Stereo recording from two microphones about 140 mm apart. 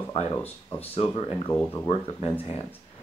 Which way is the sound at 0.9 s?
35° left (ahead or behind).